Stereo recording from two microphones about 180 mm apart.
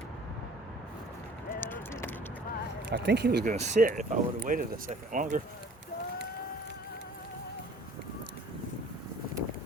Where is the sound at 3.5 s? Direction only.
45° right (ahead or behind).